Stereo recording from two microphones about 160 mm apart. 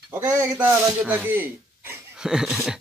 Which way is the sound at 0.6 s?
10° right (ahead or behind).